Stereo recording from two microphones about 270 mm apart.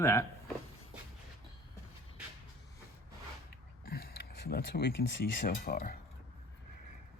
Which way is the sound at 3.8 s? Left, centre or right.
Left.